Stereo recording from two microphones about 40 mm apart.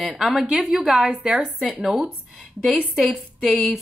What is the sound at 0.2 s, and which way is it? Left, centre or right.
A woman's voice, centre.